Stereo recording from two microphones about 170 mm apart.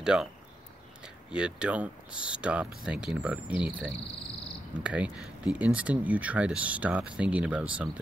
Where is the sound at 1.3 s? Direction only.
5° right (ahead or behind).